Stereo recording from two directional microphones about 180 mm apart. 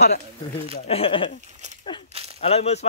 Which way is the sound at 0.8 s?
30° left (ahead or behind).